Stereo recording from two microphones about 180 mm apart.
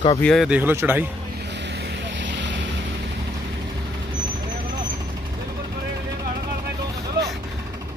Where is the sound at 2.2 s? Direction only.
85° right.